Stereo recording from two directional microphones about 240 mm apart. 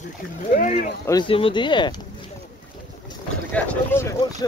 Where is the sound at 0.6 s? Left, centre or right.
Left.